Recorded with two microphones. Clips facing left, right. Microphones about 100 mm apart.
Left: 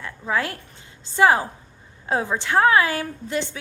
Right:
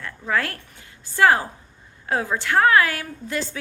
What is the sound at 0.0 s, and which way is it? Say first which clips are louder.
A woman's voice: even; 20° left (ahead or behind).